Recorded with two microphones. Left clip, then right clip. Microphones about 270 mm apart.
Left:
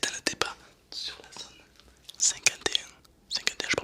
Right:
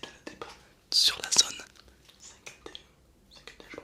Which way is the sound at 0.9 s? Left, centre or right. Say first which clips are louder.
Right 15 dB; right.